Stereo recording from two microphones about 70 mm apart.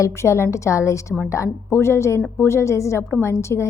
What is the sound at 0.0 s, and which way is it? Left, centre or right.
A woman's voice, left.